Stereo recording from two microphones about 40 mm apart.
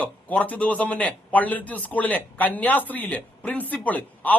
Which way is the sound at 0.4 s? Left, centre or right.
Left.